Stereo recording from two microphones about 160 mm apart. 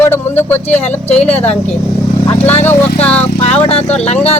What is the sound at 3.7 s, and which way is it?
Speech, 40° left (ahead or behind).